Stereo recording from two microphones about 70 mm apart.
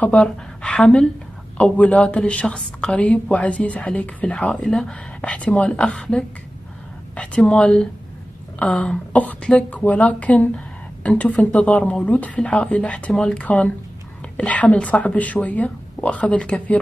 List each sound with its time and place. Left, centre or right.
0.0 s a woman's voice: centre
4.6 s speech: centre
5.2 s a woman's voice: centre